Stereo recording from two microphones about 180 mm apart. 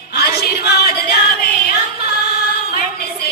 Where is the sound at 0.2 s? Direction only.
60° left (ahead or behind).